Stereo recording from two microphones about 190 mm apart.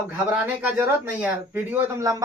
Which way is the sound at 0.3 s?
10° right (ahead or behind).